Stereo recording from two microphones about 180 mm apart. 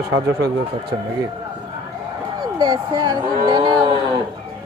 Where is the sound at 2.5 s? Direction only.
25° right (ahead or behind).